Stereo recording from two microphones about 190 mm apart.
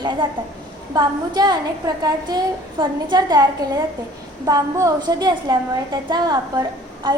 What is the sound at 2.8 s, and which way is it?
A woman's voice, 20° right (ahead or behind).